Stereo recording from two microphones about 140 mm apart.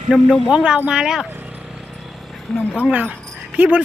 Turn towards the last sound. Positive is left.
turn(degrees=-10)  # may be behind; listen again after turning